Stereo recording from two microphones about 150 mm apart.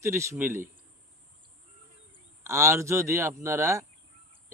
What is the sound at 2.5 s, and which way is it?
Speech, 20° right (ahead or behind).